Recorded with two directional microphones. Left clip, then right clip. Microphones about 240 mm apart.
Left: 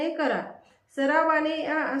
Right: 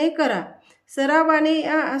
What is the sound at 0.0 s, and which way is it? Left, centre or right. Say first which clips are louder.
Speech: right 5 dB; right.